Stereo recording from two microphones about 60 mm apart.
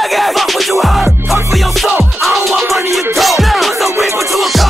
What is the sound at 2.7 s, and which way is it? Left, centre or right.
Music, right.